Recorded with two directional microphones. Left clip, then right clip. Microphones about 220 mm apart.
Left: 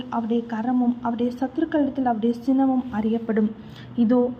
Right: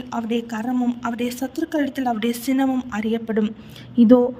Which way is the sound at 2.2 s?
55° right (ahead or behind).